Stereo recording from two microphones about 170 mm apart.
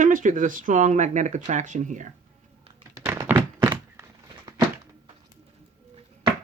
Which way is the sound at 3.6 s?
25° right (ahead or behind).